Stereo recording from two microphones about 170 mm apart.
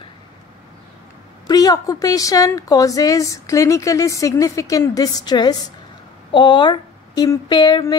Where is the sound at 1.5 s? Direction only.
20° left (ahead or behind).